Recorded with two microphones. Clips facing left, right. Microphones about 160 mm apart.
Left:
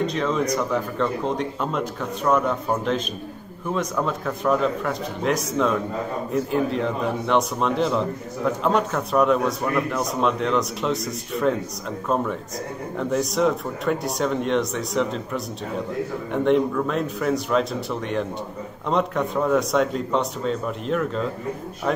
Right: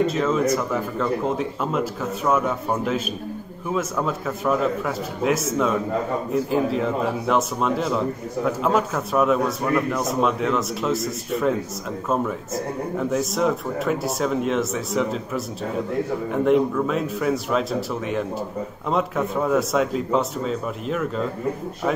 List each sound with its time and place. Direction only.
0.0 s a man's voice: 5° right (ahead or behind)